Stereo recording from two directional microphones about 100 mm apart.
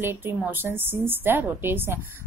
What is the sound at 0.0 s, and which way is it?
A woman's voice, 20° right (ahead or behind).